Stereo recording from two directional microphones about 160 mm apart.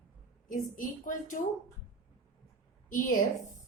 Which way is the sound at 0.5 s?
55° left (ahead or behind).